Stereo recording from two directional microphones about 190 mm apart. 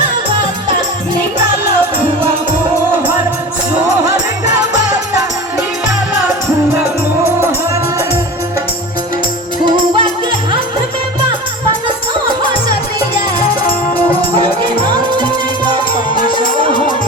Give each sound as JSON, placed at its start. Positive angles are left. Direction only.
{"t": 7.4, "sound": "music", "side_deg": -15}
{"t": 9.6, "sound": "music", "side_deg": -25}
{"t": 14.4, "sound": "music", "side_deg": -20}